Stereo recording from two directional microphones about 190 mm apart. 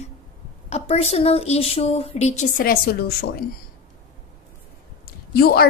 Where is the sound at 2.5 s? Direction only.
50° left (ahead or behind).